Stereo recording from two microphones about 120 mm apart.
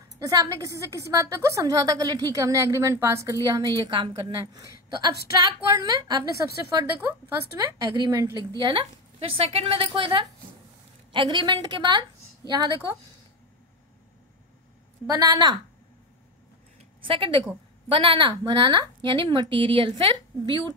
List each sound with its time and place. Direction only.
0.2 s a woman's voice: 30° right (ahead or behind)
15.0 s a woman's voice: 30° right (ahead or behind)
17.0 s a woman's voice: 45° right (ahead or behind)